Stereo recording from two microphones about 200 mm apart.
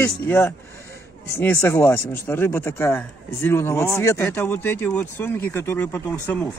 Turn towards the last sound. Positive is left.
turn(degrees=10)  # may be behind; listen again after turning